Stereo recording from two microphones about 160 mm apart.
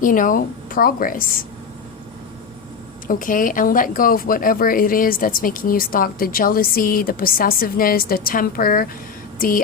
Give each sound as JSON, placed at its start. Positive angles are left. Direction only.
{"t": 0.0, "sound": "a woman's voice", "side_deg": 55}
{"t": 3.1, "sound": "a woman's voice", "side_deg": 55}